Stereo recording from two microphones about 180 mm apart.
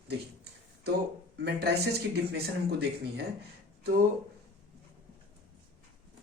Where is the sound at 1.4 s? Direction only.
65° right (ahead or behind).